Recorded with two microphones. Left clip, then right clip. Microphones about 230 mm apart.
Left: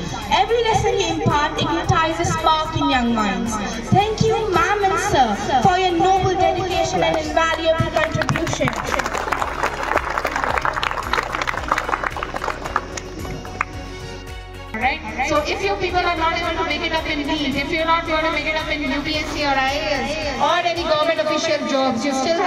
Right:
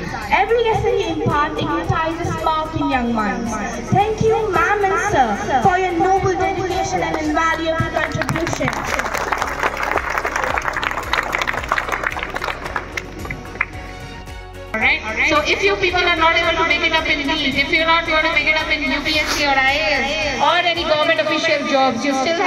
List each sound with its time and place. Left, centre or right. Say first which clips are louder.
0.3 s music: right 1 dB; left
3.9 s a sound: right 2 dB; left
7.3 s music: right 1 dB; left
14.8 s speech: right 4 dB; left